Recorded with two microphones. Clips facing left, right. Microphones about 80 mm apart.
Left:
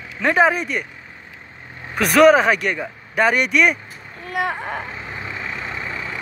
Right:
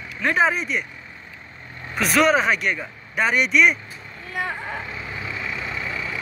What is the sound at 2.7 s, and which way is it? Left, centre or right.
Speech, left.